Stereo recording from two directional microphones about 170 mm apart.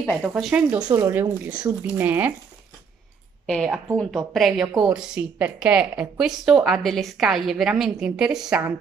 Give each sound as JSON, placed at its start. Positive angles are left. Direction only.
{"t": 0.1, "sound": "a woman's voice", "side_deg": 0}
{"t": 2.0, "sound": "speech", "side_deg": -10}
{"t": 3.4, "sound": "a woman's voice", "side_deg": 5}